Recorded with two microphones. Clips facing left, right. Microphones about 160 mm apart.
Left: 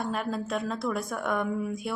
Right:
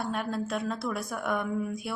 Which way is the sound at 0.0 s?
Centre (ahead or behind).